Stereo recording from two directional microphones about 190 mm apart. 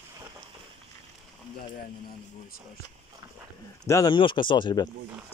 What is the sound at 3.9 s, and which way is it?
Speech, 20° left (ahead or behind).